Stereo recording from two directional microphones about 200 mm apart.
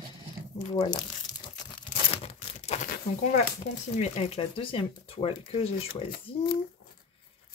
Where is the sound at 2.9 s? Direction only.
40° left (ahead or behind).